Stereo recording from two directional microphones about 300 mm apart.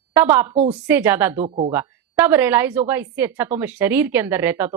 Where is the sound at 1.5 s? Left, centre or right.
Right.